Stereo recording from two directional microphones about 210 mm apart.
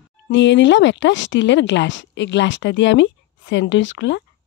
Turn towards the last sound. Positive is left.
turn(degrees=60)  # may be behind; listen again after turning